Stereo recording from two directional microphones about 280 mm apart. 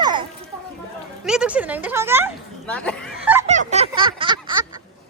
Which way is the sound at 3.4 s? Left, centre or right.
Right.